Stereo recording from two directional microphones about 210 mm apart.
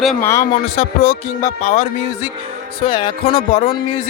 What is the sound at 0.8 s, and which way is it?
Music, 30° left (ahead or behind).